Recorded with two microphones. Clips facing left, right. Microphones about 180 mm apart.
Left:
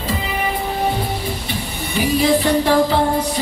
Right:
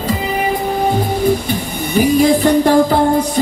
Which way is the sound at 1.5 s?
45° right (ahead or behind).